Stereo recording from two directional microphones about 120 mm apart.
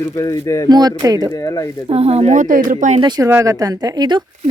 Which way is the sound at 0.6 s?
35° right (ahead or behind).